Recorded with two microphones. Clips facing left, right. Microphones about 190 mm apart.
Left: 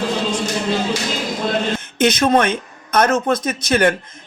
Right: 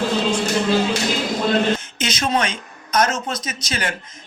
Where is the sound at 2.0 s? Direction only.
60° left (ahead or behind).